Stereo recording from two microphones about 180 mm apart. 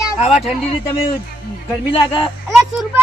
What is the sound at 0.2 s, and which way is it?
Speech, 35° left (ahead or behind).